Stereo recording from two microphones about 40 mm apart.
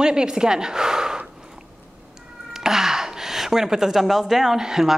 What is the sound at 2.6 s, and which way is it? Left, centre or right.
A woman's voice, centre.